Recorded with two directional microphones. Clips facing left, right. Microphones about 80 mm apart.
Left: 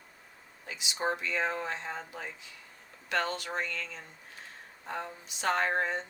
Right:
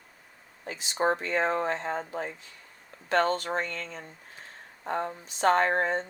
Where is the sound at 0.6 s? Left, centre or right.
Right.